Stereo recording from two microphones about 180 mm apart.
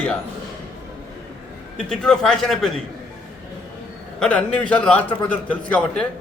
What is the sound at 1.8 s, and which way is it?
A man's voice, 5° left (ahead or behind).